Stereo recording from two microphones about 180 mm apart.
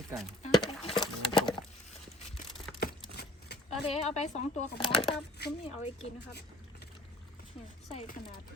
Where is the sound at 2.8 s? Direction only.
60° left (ahead or behind).